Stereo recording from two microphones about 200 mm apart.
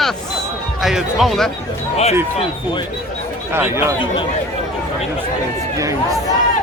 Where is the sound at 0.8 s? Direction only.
Centre (ahead or behind).